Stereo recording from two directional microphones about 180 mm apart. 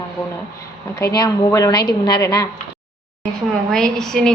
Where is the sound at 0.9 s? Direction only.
20° left (ahead or behind).